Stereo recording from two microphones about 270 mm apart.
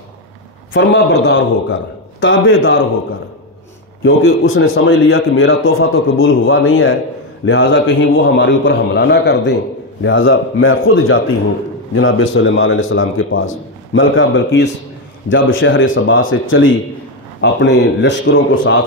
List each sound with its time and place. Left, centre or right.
0.7 s a man's voice: left
4.0 s a man's voice: left